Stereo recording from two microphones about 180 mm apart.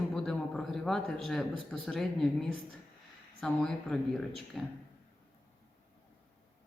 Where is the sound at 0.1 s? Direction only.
Centre (ahead or behind).